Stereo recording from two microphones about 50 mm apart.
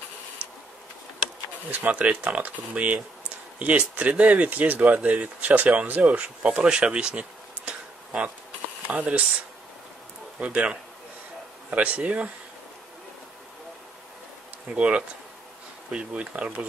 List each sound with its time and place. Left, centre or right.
1.7 s speech: right
10.4 s speech: right
14.7 s speech: right